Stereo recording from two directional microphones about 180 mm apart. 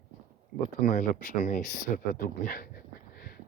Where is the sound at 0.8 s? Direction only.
50° left (ahead or behind).